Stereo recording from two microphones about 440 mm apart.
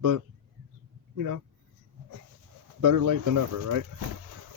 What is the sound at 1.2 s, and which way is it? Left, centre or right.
Speech, right.